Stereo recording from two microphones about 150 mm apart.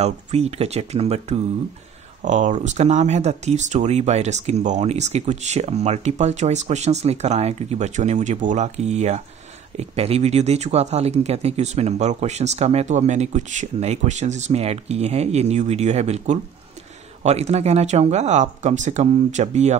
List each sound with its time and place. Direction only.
0.0 s speech: 45° right (ahead or behind)
2.2 s speech: 50° right (ahead or behind)